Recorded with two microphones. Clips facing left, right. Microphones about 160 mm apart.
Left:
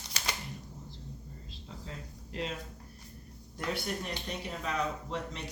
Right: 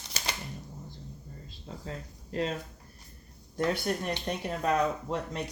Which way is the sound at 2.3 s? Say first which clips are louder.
Right 6 dB; 40° right (ahead or behind).